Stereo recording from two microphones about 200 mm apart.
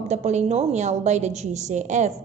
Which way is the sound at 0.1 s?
35° right (ahead or behind).